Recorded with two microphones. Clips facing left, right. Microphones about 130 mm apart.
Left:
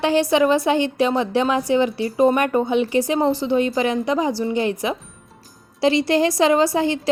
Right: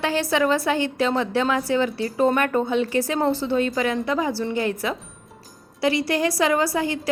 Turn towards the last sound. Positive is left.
turn(degrees=25)  # may be behind; listen again after turning